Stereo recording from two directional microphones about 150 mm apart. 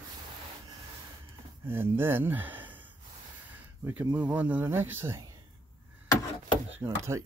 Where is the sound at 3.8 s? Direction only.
15° right (ahead or behind).